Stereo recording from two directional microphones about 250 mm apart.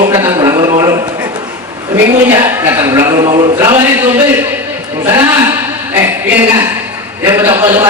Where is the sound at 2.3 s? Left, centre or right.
Centre.